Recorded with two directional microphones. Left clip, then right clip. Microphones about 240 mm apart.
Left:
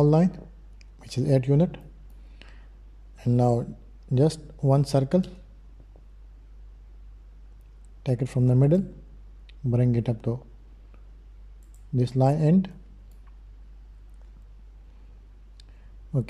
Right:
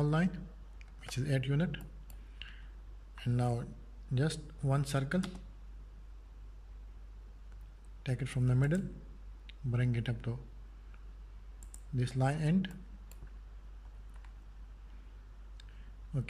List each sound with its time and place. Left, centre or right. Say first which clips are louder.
0.0 s speech: left 13 dB; left
2.4 s tick-tock: right 2 dB; left
3.2 s speech: left 13 dB; centre
8.0 s speech: left 12 dB; centre
11.9 s speech: left 12 dB; centre